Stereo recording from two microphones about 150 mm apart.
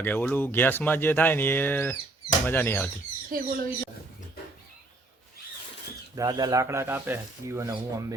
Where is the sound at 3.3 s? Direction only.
70° right (ahead or behind).